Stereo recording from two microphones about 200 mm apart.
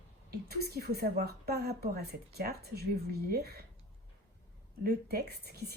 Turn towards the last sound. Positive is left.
turn(degrees=-55)  # may be behind; listen again after turning